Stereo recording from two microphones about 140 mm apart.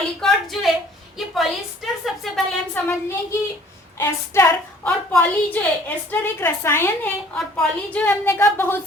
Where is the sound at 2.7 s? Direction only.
20° left (ahead or behind).